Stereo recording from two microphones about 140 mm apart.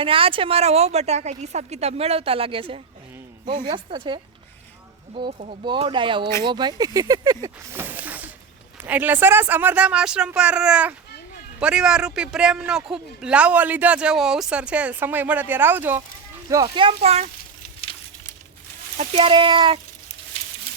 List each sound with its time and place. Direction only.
0.0 s a woman's voice: 40° right (ahead or behind)
5.6 s a man's voice: 35° right (ahead or behind); by 16.0 s 15° right (ahead or behind)
16.6 s a woman's voice: 40° right (ahead or behind)
18.9 s speech: 45° right (ahead or behind)